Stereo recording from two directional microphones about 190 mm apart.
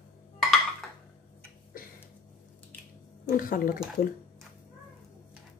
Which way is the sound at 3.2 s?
45° left (ahead or behind).